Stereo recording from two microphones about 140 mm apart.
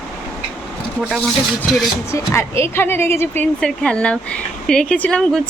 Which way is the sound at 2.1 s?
20° left (ahead or behind).